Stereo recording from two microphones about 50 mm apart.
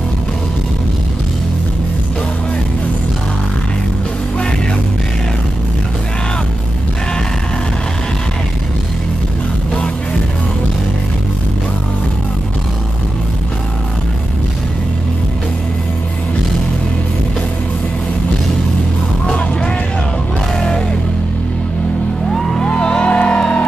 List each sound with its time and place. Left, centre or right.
19.2 s vehicle: left
20.5 s a sound: centre
22.3 s music: centre
22.6 s music: centre